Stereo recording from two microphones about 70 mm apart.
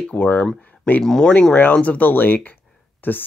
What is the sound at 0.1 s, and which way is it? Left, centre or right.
Speech, left.